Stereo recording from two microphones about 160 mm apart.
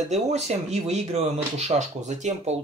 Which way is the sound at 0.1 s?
45° right (ahead or behind).